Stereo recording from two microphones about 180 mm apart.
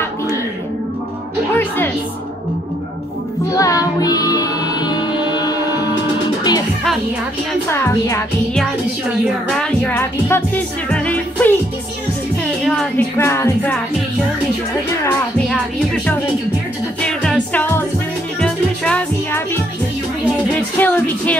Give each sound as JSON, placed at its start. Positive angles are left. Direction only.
{"t": 1.5, "sound": "a woman's voice", "side_deg": 10}
{"t": 3.5, "sound": "music", "side_deg": 20}
{"t": 7.7, "sound": "a woman's voice", "side_deg": 15}
{"t": 9.6, "sound": "music", "side_deg": 10}
{"t": 12.6, "sound": "a woman's voice", "side_deg": 10}
{"t": 15.0, "sound": "a woman's voice", "side_deg": 5}
{"t": 17.0, "sound": "music", "side_deg": 5}
{"t": 20.5, "sound": "a woman's voice", "side_deg": 10}